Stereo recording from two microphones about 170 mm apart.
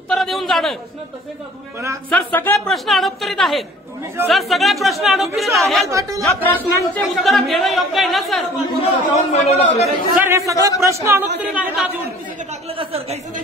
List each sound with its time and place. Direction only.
0.1 s a sound: centre (ahead or behind)
2.0 s speech: 10° left (ahead or behind)
2.7 s speech: centre (ahead or behind)
5.9 s a man's voice: 20° right (ahead or behind)
6.2 s speech: 15° left (ahead or behind)
7.0 s speech: centre (ahead or behind)
8.7 s speech: 35° left (ahead or behind)
10.2 s a man's voice: 20° right (ahead or behind)
12.6 s speech: 35° right (ahead or behind)